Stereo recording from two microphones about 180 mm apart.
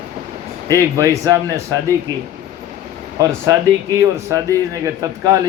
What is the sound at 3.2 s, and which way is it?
Speech, 15° right (ahead or behind).